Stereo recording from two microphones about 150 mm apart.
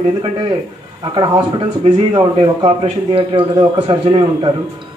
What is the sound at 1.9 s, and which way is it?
A man's voice, 30° right (ahead or behind).